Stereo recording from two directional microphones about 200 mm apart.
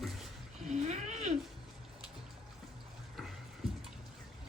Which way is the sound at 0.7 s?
35° right (ahead or behind).